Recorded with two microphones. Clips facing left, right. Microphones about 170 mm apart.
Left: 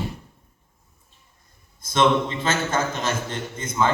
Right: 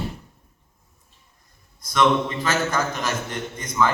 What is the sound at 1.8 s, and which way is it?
A man's voice, 25° left (ahead or behind).